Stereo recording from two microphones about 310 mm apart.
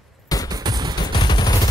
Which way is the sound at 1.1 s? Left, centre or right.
Centre.